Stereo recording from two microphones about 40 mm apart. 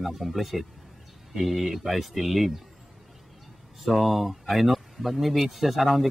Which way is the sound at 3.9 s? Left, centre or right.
Centre.